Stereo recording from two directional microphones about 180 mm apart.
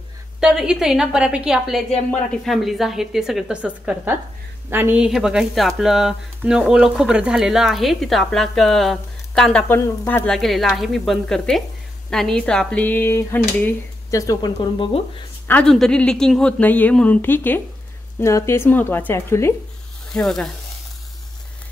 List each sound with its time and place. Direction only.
0.4 s a woman's voice: 5° right (ahead or behind); by 14.9 s 25° left (ahead or behind)
15.4 s speech: 5° left (ahead or behind)
20.1 s a woman's voice: centre (ahead or behind)